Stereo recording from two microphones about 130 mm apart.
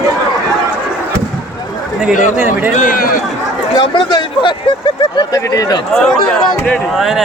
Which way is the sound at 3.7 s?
35° left (ahead or behind).